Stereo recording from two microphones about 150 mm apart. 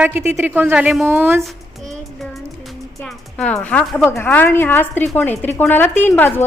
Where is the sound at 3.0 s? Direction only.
5° left (ahead or behind).